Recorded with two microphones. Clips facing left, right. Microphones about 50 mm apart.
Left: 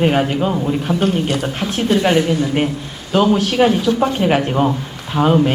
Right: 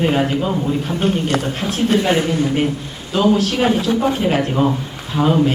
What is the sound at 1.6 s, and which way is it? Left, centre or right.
Speech, left.